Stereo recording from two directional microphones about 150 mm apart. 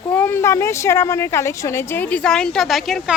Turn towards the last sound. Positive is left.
turn(degrees=0)  # may be behind; listen again after turning